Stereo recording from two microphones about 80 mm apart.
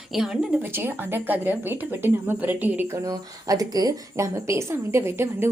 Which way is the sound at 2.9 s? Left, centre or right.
Right.